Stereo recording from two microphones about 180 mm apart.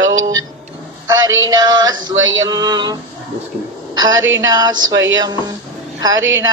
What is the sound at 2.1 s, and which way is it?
Speech, 90° right.